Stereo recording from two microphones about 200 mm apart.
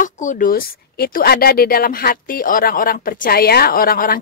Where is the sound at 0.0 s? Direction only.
40° left (ahead or behind).